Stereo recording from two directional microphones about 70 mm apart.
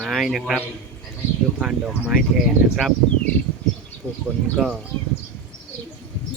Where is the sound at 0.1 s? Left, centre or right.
Centre.